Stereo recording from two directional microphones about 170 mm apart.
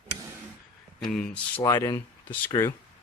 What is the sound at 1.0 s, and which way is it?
Speech, 5° left (ahead or behind).